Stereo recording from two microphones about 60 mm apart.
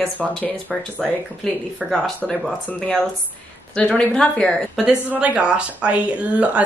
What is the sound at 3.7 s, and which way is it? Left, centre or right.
Speech, centre.